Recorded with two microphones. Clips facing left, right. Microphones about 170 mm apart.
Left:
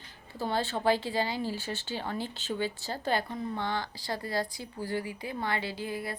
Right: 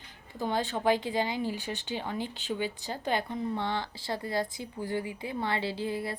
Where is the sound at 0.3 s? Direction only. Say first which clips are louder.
Even; 15° right (ahead or behind).